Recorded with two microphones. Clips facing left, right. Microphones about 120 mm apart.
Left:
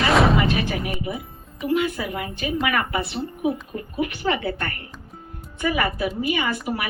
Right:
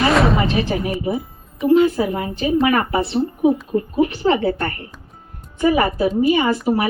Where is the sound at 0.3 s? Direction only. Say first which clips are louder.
Right 3 dB; 30° right (ahead or behind).